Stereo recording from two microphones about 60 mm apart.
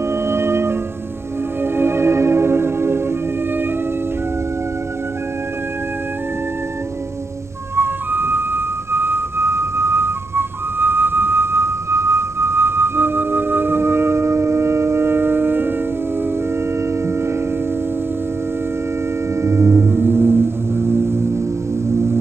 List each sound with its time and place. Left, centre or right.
0.3 s music: right
7.7 s music: right
19.4 s gong: right